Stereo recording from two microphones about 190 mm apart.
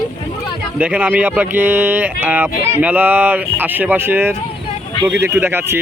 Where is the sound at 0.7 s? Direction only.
10° right (ahead or behind).